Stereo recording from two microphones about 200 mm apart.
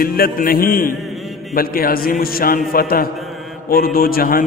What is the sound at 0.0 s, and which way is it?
A man's voice, 45° left (ahead or behind).